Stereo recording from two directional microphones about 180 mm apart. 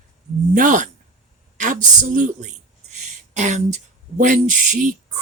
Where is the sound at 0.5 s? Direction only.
45° right (ahead or behind).